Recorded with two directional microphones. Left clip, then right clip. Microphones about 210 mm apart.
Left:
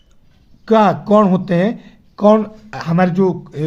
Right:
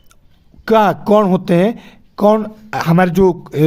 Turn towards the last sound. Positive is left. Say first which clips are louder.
# right 4 dB
turn(degrees=-45)  # may be behind; listen again after turning